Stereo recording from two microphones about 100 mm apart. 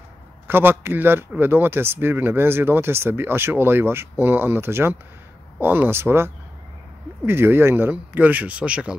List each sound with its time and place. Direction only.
0.5 s speech: 20° right (ahead or behind)